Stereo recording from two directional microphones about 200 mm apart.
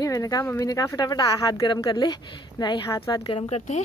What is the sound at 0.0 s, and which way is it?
Speech, 15° left (ahead or behind).